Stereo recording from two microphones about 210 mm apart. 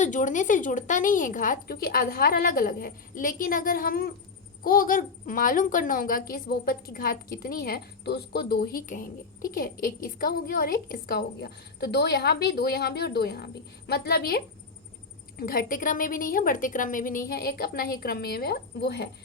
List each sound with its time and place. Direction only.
0.0 s a woman's voice: 35° left (ahead or behind)